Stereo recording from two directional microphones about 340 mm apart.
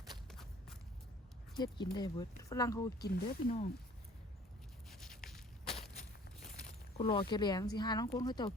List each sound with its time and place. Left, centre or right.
0.3 s walk: centre
1.5 s speech: centre
3.0 s speech: left
4.9 s a sound: centre
6.9 s speech: centre